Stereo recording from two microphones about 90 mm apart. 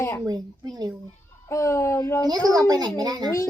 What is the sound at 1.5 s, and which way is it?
Speech, 35° left (ahead or behind).